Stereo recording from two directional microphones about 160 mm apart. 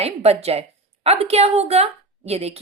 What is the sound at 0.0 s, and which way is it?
Speech, 40° right (ahead or behind).